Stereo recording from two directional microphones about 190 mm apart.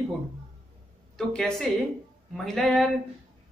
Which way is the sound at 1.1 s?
5° left (ahead or behind).